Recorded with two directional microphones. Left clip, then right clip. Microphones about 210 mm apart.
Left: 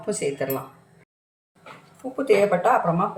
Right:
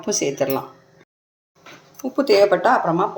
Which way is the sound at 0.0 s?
40° right (ahead or behind).